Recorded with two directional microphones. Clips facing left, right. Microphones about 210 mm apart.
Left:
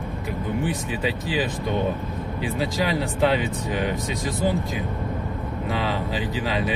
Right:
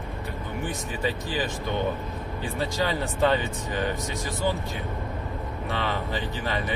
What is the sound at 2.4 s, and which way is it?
Speech, 90° left.